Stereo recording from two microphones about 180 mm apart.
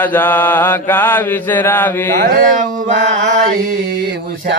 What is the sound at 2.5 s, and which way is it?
Mantra, 45° right (ahead or behind).